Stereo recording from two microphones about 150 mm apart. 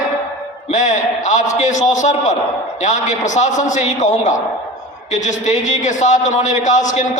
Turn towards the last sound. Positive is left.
turn(degrees=55)  # may be behind; listen again after turning